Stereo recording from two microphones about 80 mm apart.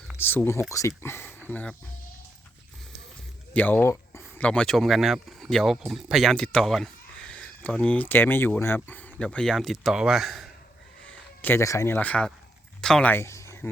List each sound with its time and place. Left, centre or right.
0.2 s speech: left
0.7 s speech: left
3.5 s speech: centre
6.3 s speech: centre
11.0 s a sound: centre
11.6 s speech: left
11.9 s speech: centre
13.1 s a sound: left